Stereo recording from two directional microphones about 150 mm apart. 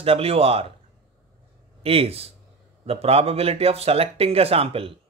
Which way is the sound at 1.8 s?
40° right (ahead or behind).